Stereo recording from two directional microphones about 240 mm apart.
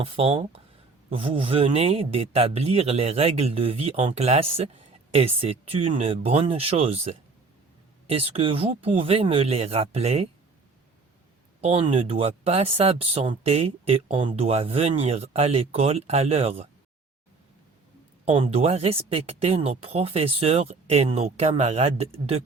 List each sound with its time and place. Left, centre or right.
0.0 s speech: right
11.6 s speech: right
18.3 s speech: right